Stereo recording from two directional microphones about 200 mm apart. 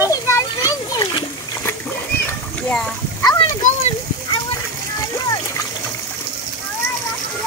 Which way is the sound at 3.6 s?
30° left (ahead or behind).